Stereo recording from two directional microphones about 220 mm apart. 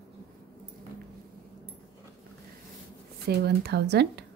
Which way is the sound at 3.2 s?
45° right (ahead or behind).